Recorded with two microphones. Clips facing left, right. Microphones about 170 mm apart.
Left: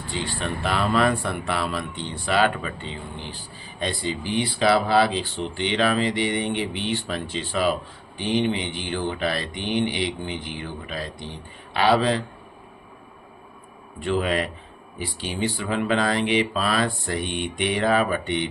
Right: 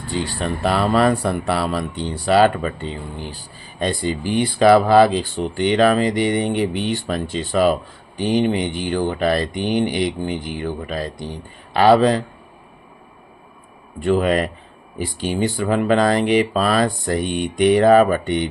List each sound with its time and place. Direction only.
0.1 s speech: 40° right (ahead or behind)
14.0 s speech: 45° right (ahead or behind)